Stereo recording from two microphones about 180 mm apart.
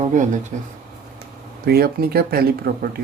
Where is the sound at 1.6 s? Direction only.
60° right (ahead or behind).